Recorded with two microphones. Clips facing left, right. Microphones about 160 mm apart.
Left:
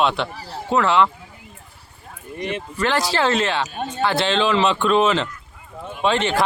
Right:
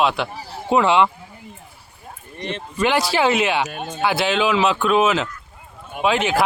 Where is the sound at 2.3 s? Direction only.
10° left (ahead or behind).